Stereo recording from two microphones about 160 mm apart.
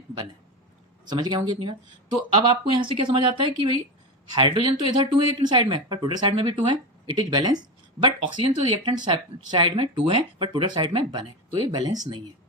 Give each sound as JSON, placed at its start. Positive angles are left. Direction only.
{"t": 1.0, "sound": "speech", "side_deg": -25}